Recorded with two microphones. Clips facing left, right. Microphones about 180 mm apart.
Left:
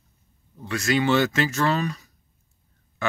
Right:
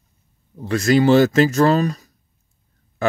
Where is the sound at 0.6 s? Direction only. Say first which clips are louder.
Right 8 dB; 35° right (ahead or behind).